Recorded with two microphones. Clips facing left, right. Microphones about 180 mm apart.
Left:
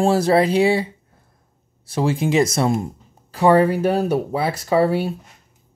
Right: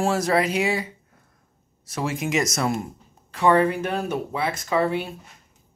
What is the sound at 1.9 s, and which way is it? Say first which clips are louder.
Speech: left 6 dB; 30° left (ahead or behind).